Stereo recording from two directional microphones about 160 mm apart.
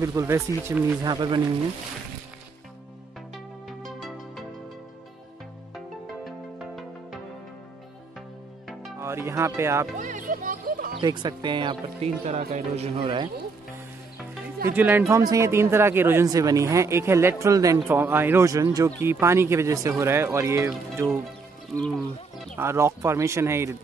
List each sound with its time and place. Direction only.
0.0 s speech: 20° right (ahead or behind)
1.1 s speech: 30° right (ahead or behind)
3.6 s music: centre (ahead or behind)
6.2 s music: centre (ahead or behind)
9.0 s speech: 15° right (ahead or behind)
9.9 s music: 50° right (ahead or behind)
11.0 s speech: 25° right (ahead or behind)
12.3 s speech: 45° right (ahead or behind)
14.8 s speech: 10° right (ahead or behind)
21.7 s speech: 5° left (ahead or behind)
22.6 s speech: 15° right (ahead or behind)